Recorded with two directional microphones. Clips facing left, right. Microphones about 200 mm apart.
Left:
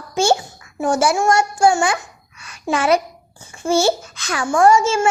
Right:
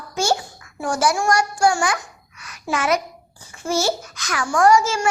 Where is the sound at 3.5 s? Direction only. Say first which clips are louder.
Left 5 dB; 25° left (ahead or behind).